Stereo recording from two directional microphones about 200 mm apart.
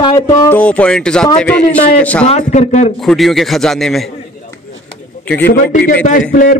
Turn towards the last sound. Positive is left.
turn(degrees=40)  # may be behind; listen again after turning